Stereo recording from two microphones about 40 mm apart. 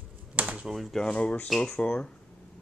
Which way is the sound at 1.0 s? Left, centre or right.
Left.